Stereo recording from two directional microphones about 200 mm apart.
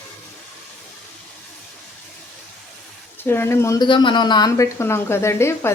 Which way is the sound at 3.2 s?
10° left (ahead or behind).